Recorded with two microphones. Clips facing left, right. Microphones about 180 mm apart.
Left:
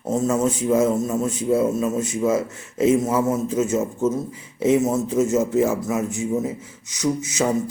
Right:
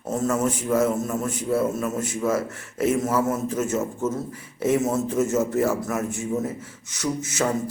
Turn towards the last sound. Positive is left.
turn(degrees=15)  # may be behind; listen again after turning